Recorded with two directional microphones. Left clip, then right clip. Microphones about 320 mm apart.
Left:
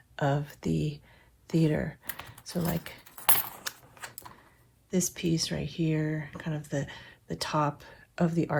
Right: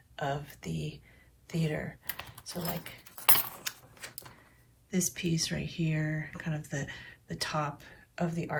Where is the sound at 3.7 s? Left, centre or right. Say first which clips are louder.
Left 1 dB; centre.